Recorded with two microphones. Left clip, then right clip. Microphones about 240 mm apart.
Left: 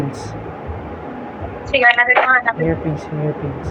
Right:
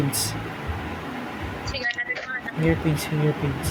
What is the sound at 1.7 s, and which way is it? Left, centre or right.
Speech, centre.